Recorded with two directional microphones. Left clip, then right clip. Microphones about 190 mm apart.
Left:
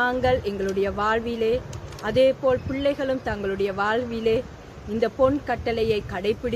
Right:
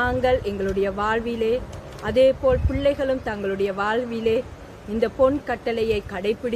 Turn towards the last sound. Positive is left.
turn(degrees=15)  # may be behind; listen again after turning